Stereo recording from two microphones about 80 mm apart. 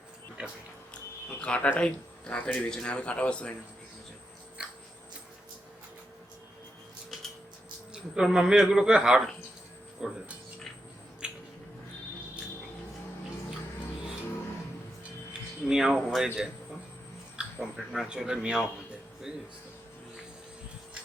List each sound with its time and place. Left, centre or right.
0.4 s a man's voice: centre
1.3 s speech: centre
7.9 s a man's voice: centre
11.2 s a sound: centre
15.3 s speech: centre